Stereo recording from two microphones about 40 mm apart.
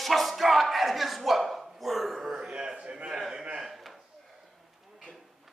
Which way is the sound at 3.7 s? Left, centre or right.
Centre.